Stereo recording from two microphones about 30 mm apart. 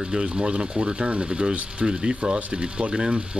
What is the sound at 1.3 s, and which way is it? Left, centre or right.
Speech, right.